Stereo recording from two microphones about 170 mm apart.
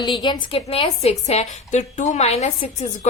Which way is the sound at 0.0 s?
25° left (ahead or behind).